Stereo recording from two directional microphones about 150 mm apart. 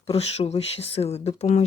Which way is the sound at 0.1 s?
45° left (ahead or behind).